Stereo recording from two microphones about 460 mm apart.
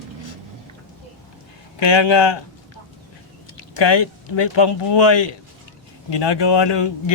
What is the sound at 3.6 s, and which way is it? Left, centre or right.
Speech, left.